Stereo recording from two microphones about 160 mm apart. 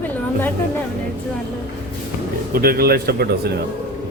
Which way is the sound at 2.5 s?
70° right (ahead or behind).